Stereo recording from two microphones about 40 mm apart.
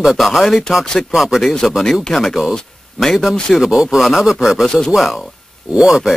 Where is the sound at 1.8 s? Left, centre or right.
Centre.